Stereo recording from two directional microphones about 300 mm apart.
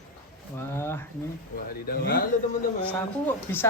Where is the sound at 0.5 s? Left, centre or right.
Centre.